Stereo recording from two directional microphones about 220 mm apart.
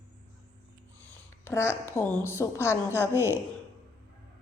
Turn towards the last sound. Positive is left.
turn(degrees=10)  # may be behind; listen again after turning